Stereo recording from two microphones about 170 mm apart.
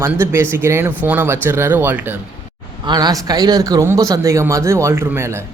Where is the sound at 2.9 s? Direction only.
25° right (ahead or behind).